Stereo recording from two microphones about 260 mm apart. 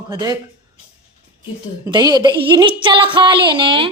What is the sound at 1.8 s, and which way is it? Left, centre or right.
Speech, centre.